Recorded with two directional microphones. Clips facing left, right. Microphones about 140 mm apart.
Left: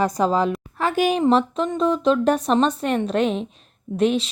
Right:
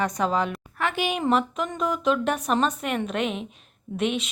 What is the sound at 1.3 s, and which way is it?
A woman's voice, 30° left (ahead or behind).